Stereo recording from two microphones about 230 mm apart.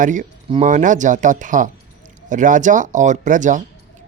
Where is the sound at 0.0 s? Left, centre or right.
Right.